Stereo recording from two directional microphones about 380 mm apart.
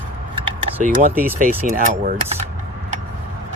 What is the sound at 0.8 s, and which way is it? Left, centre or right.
Speech, right.